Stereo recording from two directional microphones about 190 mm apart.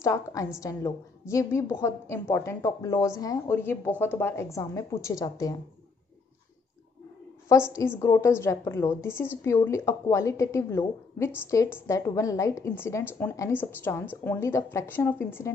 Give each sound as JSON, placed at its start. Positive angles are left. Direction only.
{"t": 0.0, "sound": "a woman's voice", "side_deg": 15}
{"t": 7.4, "sound": "a woman's voice", "side_deg": 15}